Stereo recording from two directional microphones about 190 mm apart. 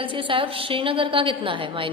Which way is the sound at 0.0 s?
25° right (ahead or behind).